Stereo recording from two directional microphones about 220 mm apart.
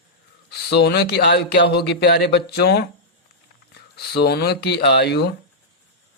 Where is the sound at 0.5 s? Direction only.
50° left (ahead or behind).